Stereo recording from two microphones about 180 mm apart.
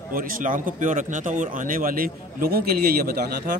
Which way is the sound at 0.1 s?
50° right (ahead or behind).